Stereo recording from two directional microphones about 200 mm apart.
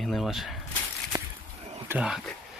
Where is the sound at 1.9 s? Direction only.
5° right (ahead or behind).